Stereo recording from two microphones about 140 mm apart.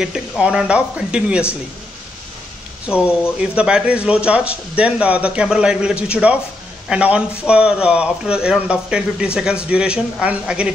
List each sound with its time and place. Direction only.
0.0 s a man's voice: 5° right (ahead or behind)
2.9 s a man's voice: 5° right (ahead or behind)